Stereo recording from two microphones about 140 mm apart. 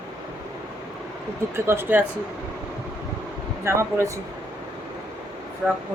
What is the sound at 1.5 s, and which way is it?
Speech, 15° right (ahead or behind).